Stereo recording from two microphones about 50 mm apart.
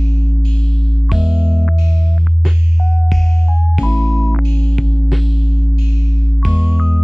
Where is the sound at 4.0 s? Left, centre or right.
Left.